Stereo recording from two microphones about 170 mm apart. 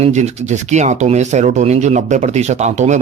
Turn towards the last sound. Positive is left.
turn(degrees=-45)  # may be behind; listen again after turning